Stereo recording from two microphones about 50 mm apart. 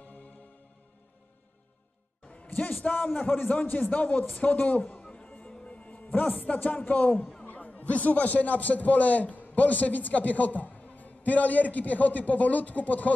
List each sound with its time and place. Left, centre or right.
2.2 s a man's voice: left
5.0 s music: left
6.0 s a man's voice: left